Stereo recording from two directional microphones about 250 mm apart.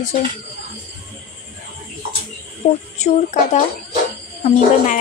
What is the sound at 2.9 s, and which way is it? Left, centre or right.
Speech, left.